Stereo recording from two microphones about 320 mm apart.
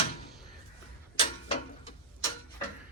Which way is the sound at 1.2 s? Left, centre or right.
Centre.